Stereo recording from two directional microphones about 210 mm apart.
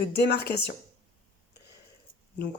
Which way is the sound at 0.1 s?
50° left (ahead or behind).